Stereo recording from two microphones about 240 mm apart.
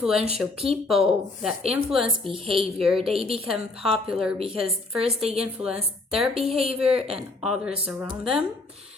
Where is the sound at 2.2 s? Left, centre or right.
Right.